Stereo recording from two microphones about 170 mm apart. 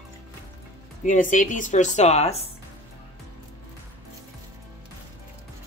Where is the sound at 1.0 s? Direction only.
50° left (ahead or behind).